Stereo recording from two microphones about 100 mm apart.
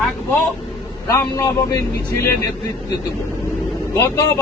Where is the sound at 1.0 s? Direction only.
30° left (ahead or behind).